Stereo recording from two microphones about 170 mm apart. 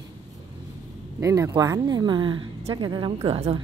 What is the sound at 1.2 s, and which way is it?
A woman's voice, 20° right (ahead or behind).